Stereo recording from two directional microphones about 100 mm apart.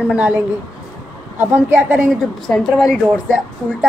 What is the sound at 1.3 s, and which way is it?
Speech, 20° right (ahead or behind).